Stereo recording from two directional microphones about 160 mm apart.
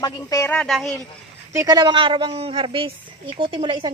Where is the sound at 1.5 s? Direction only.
25° right (ahead or behind).